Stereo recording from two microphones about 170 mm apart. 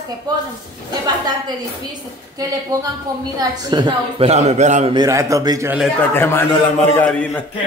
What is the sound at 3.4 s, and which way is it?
A man's voice, 25° right (ahead or behind).